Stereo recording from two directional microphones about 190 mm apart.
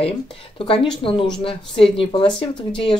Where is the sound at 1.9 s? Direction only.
25° left (ahead or behind).